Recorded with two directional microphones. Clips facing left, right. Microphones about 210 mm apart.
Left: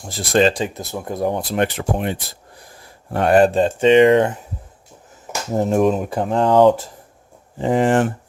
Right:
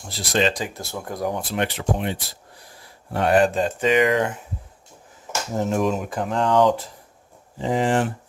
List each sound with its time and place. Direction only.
0.1 s speech: 45° left (ahead or behind)
0.5 s speech: 25° left (ahead or behind)
1.4 s speech: 40° left (ahead or behind)
5.5 s speech: 40° left (ahead or behind)
7.6 s speech: 55° left (ahead or behind)